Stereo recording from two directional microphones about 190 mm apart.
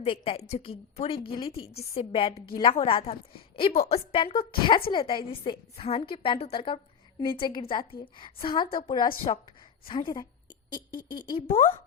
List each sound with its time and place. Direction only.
0.0 s a woman's voice: 30° left (ahead or behind)
11.5 s a woman's voice: 40° left (ahead or behind)